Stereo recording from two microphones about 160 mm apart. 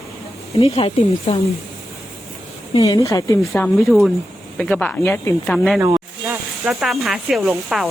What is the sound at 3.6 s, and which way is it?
Speech, 5° left (ahead or behind).